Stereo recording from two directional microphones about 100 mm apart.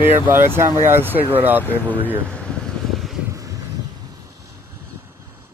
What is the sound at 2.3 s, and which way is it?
Vehicle, 10° left (ahead or behind).